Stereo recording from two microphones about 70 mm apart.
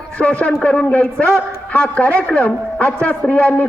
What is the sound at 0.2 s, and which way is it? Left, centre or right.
A man's voice, centre.